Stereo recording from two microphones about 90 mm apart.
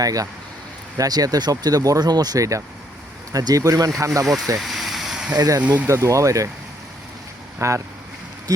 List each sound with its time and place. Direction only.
0.0 s speech: 40° right (ahead or behind)
4.5 s a sound: centre (ahead or behind)
5.4 s speech: 45° right (ahead or behind)
5.6 s speech: 15° right (ahead or behind)
5.9 s speech: 35° right (ahead or behind)
7.6 s speech: 35° right (ahead or behind)